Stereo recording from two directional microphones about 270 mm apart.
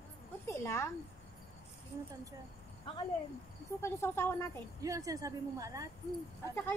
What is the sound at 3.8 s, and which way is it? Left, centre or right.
Speech, centre.